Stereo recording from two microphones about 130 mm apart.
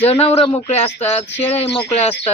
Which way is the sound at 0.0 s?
50° left (ahead or behind).